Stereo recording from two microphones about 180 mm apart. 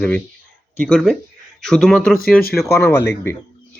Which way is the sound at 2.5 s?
15° left (ahead or behind).